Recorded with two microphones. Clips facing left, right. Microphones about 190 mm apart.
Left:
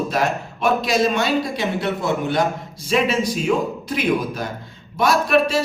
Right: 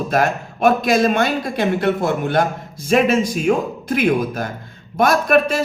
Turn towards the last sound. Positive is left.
turn(degrees=-50)  # may be behind; listen again after turning